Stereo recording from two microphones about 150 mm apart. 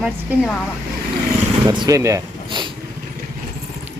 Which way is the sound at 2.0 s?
20° right (ahead or behind).